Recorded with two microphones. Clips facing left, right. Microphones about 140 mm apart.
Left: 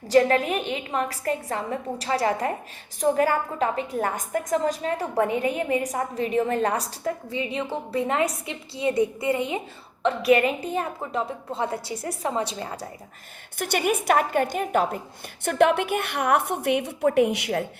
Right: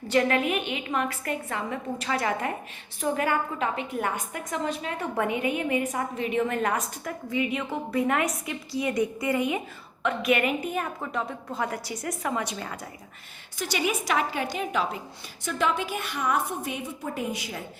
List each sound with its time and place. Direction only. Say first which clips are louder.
0.1 s a woman's voice: left 4 dB; 35° left (ahead or behind)
13.6 s a woman's voice: left 4 dB; 55° left (ahead or behind)
15.4 s a woman's voice: left 7 dB; 60° left (ahead or behind)